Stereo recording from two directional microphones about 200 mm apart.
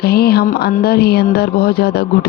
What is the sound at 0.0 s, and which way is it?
Speech, 50° left (ahead or behind).